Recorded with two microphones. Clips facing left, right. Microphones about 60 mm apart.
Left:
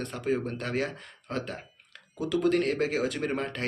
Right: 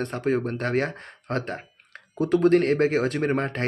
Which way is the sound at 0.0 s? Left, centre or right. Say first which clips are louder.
Right 5 dB; right.